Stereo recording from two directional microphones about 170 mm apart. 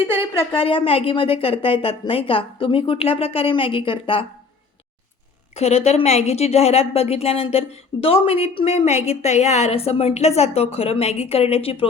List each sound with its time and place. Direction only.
0.3 s a woman's voice: 30° left (ahead or behind)
5.5 s a woman's voice: 40° left (ahead or behind)